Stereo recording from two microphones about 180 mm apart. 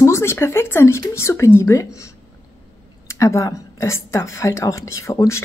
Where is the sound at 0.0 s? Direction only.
15° left (ahead or behind).